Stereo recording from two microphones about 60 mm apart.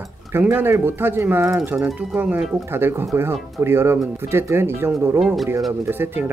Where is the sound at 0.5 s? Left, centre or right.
Right.